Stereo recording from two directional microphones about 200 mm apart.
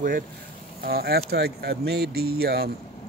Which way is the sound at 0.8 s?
50° right (ahead or behind).